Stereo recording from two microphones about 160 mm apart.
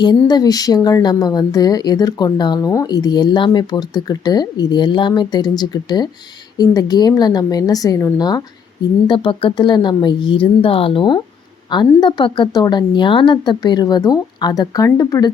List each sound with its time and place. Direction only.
0.0 s a woman's voice: 25° left (ahead or behind)
9.0 s a woman's voice: 30° left (ahead or behind)